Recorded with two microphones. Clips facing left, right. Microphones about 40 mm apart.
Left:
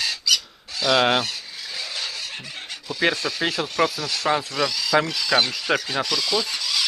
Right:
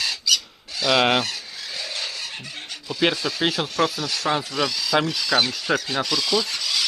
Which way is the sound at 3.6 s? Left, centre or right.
Right.